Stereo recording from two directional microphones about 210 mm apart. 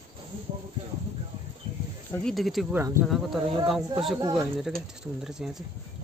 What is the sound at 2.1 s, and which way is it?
Speech, centre (ahead or behind).